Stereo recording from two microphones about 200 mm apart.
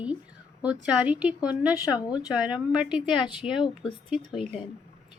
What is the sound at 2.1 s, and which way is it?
Speech, 20° left (ahead or behind).